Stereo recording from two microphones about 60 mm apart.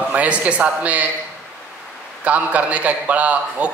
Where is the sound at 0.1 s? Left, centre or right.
Right.